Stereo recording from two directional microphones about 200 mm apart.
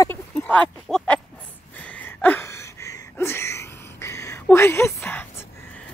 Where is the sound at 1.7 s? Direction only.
10° left (ahead or behind).